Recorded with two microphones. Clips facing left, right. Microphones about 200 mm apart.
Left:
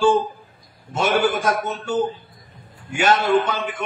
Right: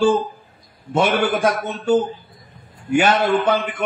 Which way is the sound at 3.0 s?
60° right (ahead or behind).